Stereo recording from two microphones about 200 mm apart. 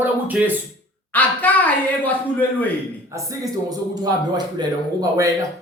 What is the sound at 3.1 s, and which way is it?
A man's voice, 20° right (ahead or behind).